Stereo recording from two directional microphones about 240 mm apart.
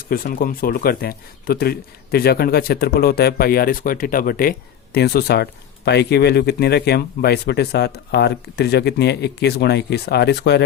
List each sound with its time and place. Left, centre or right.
0.1 s speech: left